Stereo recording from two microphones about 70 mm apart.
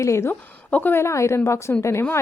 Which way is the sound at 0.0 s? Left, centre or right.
Left.